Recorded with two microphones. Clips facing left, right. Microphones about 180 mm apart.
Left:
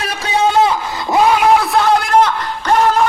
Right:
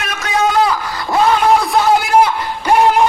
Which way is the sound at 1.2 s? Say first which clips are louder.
Even; 10° left (ahead or behind).